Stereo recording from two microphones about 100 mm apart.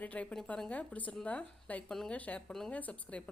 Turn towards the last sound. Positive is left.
turn(degrees=15)  # may be behind; listen again after turning